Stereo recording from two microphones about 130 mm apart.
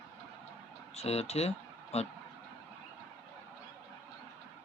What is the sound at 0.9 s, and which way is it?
Speech, 55° left (ahead or behind).